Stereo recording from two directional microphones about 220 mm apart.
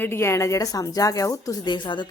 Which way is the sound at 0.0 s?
10° left (ahead or behind).